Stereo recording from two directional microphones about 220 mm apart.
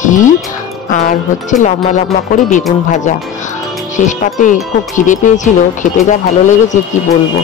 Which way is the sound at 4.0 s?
35° left (ahead or behind).